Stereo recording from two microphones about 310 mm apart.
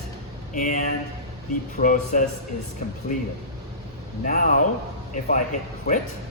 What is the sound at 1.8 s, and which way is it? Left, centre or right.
Speech, left.